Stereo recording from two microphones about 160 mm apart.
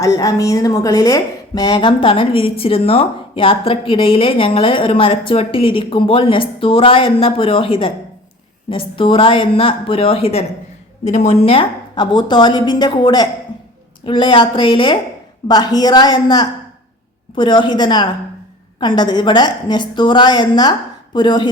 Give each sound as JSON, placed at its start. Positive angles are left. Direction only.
{"t": 0.0, "sound": "a woman's voice", "side_deg": 20}